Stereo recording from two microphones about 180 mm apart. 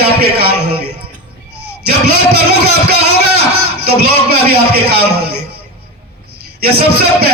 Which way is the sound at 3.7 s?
60° right (ahead or behind).